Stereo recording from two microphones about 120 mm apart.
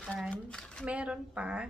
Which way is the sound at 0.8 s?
10° right (ahead or behind).